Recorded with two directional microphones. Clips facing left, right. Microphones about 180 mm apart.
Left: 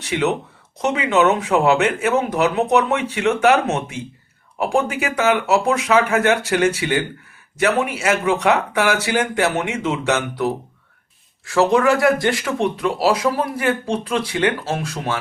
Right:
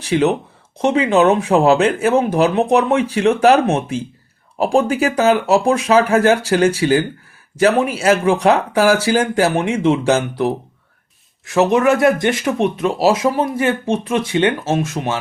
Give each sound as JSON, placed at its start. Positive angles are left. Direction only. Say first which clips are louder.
{"t": 0.0, "sound": "speech", "louder": "right 5 dB", "side_deg": -30}